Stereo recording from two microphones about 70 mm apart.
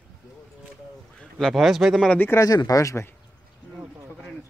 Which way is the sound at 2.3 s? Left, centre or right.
Left.